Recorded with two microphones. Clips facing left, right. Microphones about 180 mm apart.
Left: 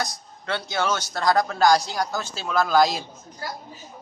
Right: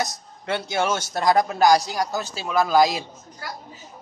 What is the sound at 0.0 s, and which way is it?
A man's voice, 25° right (ahead or behind).